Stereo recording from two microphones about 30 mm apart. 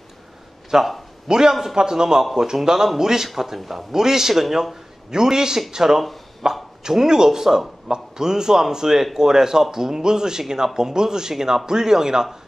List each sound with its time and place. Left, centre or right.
0.7 s speech: centre
3.5 s a man's voice: centre
3.9 s a man's voice: centre